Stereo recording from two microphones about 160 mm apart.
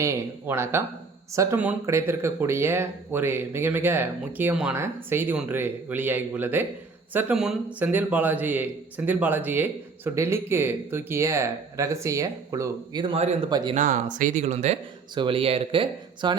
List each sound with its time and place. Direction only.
0.0 s speech: 15° right (ahead or behind)
13.7 s speech: 50° right (ahead or behind)
15.1 s speech: 30° right (ahead or behind)